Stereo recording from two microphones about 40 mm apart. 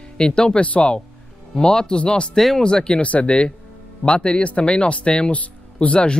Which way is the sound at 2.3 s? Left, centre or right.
Centre.